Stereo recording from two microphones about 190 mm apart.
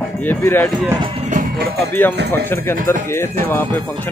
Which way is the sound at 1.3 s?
45° right (ahead or behind).